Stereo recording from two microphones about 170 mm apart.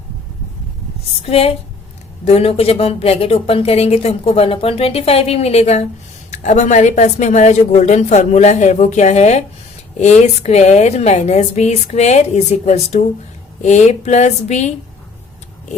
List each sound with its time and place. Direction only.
1.2 s a woman's voice: 35° left (ahead or behind)